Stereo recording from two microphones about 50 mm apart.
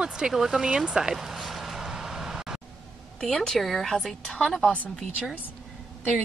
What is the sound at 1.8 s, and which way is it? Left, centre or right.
Vehicle, centre.